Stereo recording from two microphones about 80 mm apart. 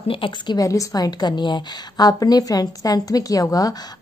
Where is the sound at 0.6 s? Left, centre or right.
Left.